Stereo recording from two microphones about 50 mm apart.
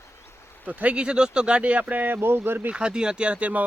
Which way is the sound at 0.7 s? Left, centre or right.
Right.